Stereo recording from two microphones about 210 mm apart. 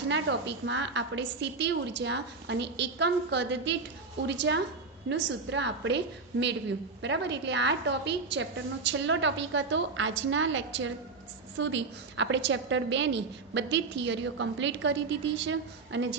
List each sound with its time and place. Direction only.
0.1 s a woman's voice: 55° right (ahead or behind)
7.0 s a woman's voice: 55° right (ahead or behind)